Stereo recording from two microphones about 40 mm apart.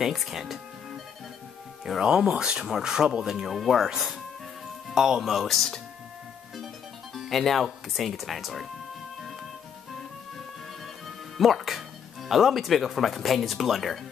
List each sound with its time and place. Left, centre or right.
0.0 s speech: centre
1.9 s speech: centre
7.2 s speech: centre
11.1 s speech: centre